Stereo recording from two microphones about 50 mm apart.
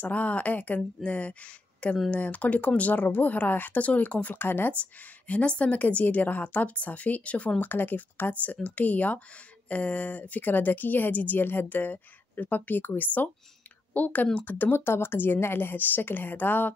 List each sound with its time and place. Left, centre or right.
0.0 s a woman's voice: left
4.4 s speech: left
4.7 s a woman's voice: left
7.6 s a woman's voice: left